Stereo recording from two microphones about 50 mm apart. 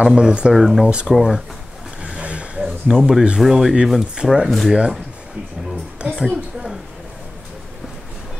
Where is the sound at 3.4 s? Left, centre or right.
Centre.